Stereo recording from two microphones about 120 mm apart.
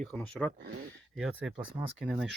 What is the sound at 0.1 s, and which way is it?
Speech, 5° left (ahead or behind).